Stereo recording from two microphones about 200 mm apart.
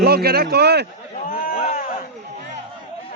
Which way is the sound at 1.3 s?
45° left (ahead or behind).